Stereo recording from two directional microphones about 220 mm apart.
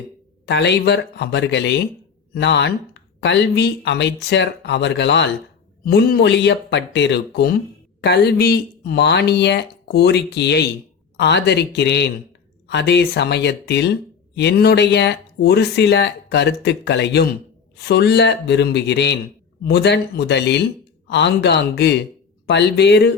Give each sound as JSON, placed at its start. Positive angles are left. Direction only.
{"t": 0.4, "sound": "speech", "side_deg": 50}